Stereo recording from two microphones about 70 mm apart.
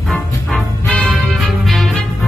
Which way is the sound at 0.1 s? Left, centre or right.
Centre.